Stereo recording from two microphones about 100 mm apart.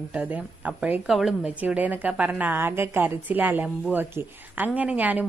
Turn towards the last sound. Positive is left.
turn(degrees=-15)  # may be behind; listen again after turning